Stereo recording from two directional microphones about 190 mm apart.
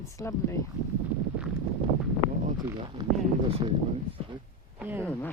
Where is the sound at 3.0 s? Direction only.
20° right (ahead or behind).